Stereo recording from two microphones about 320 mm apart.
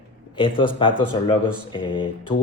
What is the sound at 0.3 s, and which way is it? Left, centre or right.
Speech, centre.